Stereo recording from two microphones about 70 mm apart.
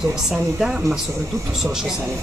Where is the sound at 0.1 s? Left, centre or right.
Centre.